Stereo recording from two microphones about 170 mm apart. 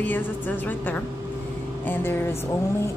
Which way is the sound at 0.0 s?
10° left (ahead or behind).